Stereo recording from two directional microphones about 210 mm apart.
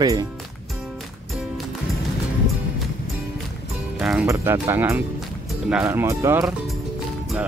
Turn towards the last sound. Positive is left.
turn(degrees=-15)  # may be behind; listen again after turning